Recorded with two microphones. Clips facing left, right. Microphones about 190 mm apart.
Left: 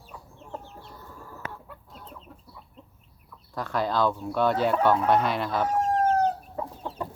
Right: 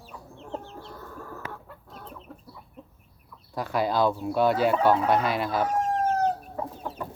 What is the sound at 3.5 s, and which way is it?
Speech, 10° right (ahead or behind).